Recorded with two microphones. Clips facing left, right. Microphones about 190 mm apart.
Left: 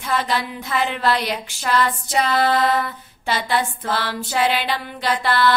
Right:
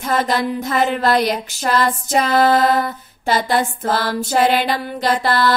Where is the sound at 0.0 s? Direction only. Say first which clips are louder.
Right 4 dB; 45° right (ahead or behind).